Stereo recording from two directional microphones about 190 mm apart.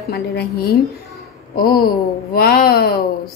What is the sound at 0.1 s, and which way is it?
A woman's voice, 55° left (ahead or behind).